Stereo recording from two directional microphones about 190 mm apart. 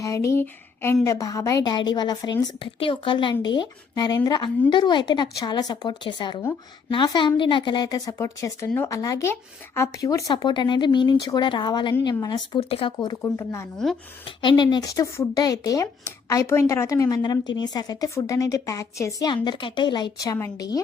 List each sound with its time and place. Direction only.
0.0 s a woman's voice: 15° left (ahead or behind)